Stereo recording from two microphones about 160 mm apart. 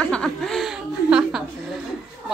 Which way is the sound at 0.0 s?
5° left (ahead or behind).